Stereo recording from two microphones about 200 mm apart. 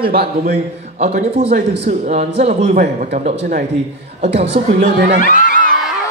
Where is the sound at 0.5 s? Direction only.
30° right (ahead or behind).